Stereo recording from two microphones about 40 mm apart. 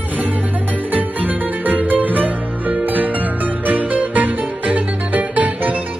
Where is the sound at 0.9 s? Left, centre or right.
Right.